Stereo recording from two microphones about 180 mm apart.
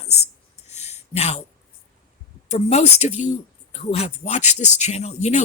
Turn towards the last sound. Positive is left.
turn(degrees=40)  # may be behind; listen again after turning